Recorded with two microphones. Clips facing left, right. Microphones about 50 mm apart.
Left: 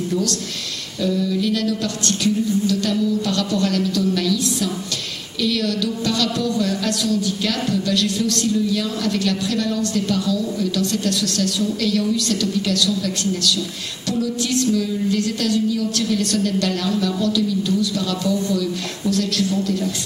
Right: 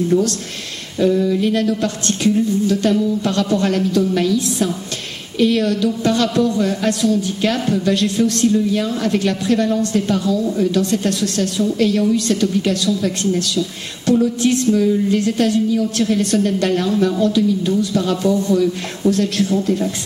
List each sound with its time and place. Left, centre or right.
1.0 s speech: right